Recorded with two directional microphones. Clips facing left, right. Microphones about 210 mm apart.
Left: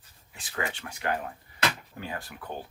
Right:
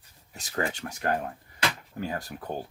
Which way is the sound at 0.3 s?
40° right (ahead or behind).